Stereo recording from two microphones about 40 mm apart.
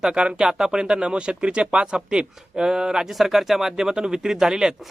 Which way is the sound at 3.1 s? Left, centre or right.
Centre.